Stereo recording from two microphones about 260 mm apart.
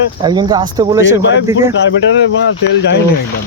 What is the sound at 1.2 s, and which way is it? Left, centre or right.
Speech, left.